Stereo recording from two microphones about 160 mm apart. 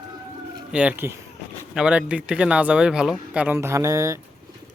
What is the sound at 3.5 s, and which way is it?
Speech, 20° right (ahead or behind).